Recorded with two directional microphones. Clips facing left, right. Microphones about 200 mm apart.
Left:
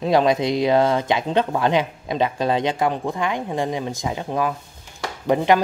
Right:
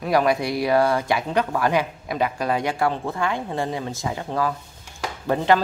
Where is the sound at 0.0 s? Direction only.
20° left (ahead or behind).